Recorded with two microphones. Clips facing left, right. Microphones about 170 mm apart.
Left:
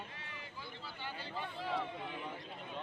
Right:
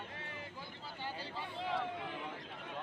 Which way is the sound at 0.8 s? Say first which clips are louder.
Right 3 dB; 35° right (ahead or behind).